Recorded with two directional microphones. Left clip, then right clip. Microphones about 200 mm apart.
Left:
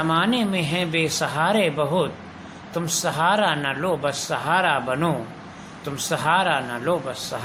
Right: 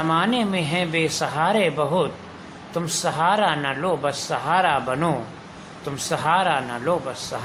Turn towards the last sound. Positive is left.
turn(degrees=0)  # may be behind; listen again after turning